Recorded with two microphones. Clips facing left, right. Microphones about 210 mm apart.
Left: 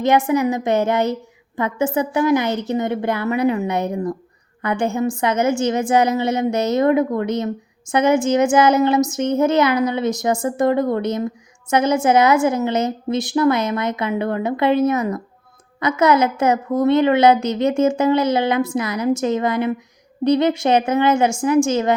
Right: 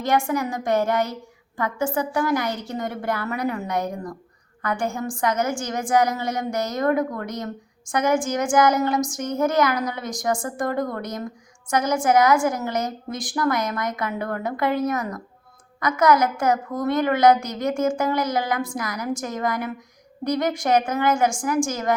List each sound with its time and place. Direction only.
0.0 s a woman's voice: 20° left (ahead or behind)